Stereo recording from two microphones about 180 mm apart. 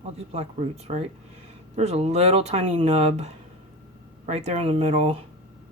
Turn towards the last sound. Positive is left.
turn(degrees=-35)  # may be behind; listen again after turning